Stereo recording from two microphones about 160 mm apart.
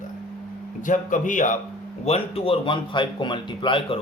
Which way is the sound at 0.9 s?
55° left (ahead or behind).